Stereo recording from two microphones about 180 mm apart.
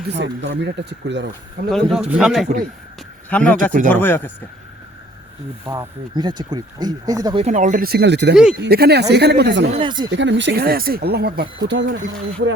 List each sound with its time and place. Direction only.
0.0 s speech: 75° right (ahead or behind)
1.7 s speech: 5° right (ahead or behind)
3.7 s speech: 45° right (ahead or behind)
3.9 s speech: 10° left (ahead or behind)
5.6 s speech: 15° right (ahead or behind)
6.1 s speech: 25° right (ahead or behind)
7.4 s speech: 45° right (ahead or behind); by 8.4 s 70° right (ahead or behind)
8.5 s speech: 60° right (ahead or behind)
9.6 s speech: 30° right (ahead or behind)
10.1 s speech: 85° right